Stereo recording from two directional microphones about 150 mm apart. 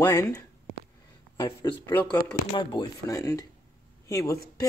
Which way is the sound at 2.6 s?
30° left (ahead or behind).